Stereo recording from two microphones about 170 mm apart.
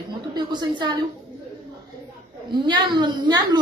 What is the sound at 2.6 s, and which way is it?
Speech, 25° right (ahead or behind).